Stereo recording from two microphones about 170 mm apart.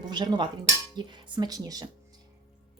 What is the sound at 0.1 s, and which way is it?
A woman's voice, 25° right (ahead or behind).